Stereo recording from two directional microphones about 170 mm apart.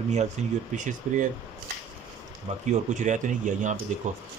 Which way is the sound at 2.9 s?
45° right (ahead or behind).